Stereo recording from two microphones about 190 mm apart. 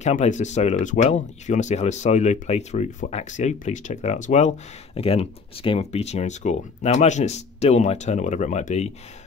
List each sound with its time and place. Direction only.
0.0 s speech: 40° left (ahead or behind)